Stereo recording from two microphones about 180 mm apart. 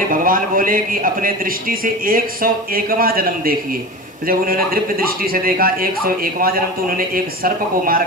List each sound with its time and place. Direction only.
0.1 s a man's voice: 50° right (ahead or behind)